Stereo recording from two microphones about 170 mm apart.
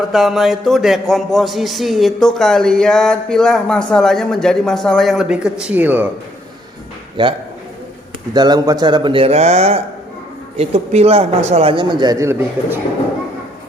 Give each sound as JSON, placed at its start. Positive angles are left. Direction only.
{"t": 0.1, "sound": "a man's voice", "side_deg": 0}
{"t": 7.2, "sound": "a man's voice", "side_deg": -25}